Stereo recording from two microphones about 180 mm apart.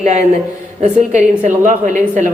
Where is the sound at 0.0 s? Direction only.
40° right (ahead or behind).